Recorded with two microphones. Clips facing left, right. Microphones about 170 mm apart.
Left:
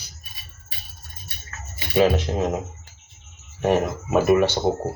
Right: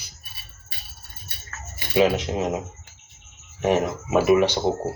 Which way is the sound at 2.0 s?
15° right (ahead or behind).